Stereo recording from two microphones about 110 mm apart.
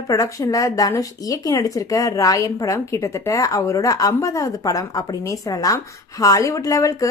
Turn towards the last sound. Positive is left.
turn(degrees=30)  # may be behind; listen again after turning